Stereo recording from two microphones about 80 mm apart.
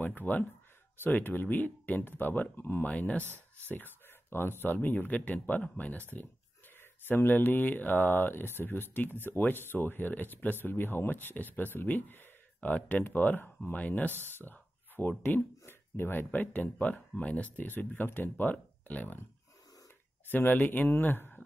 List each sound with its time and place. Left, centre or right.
0.0 s speech: left
3.3 s speech: right
3.7 s speech: left
20.2 s speech: left